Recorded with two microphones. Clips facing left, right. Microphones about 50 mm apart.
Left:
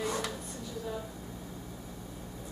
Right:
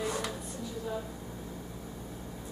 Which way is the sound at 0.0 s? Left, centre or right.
Centre.